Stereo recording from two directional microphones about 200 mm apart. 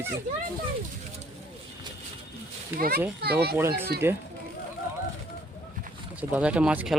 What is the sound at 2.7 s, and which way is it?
Speech, 45° right (ahead or behind).